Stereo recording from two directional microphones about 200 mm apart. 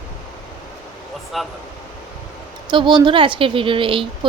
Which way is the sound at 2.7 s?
20° right (ahead or behind).